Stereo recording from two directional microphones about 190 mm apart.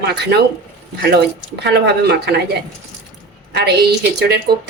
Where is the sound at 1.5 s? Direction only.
60° right (ahead or behind).